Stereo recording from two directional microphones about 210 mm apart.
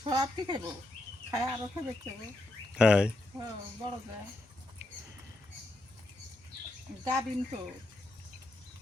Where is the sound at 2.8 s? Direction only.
5° right (ahead or behind).